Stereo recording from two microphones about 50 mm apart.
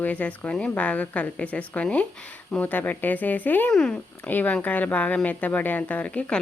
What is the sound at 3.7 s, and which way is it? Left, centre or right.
Speech, centre.